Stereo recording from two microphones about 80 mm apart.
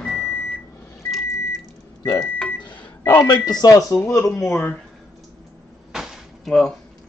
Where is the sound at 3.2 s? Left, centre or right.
Left.